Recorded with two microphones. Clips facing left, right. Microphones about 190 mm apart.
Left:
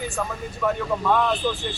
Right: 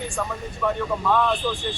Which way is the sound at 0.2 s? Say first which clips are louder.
Even; 5° left (ahead or behind).